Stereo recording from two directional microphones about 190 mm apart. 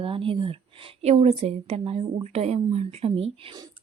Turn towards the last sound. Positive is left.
turn(degrees=-30)  # may be behind; listen again after turning